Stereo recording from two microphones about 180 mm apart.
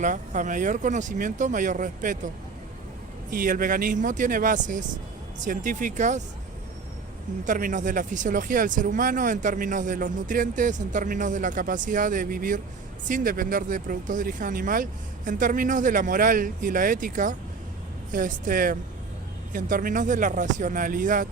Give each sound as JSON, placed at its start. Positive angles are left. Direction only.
{"t": 0.0, "sound": "speech", "side_deg": -45}
{"t": 7.4, "sound": "speech", "side_deg": -45}